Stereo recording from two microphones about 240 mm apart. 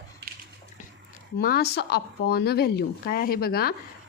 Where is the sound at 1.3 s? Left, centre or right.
Left.